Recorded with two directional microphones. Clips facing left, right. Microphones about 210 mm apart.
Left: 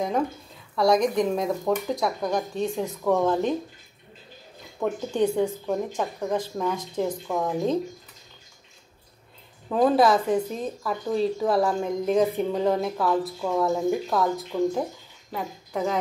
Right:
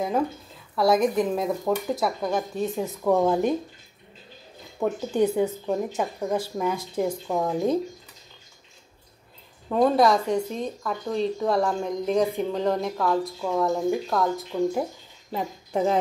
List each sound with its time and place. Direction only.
0.7 s speech: 5° right (ahead or behind)
4.7 s speech: 5° right (ahead or behind)
9.7 s speech: centre (ahead or behind)
15.3 s a woman's voice: 30° right (ahead or behind)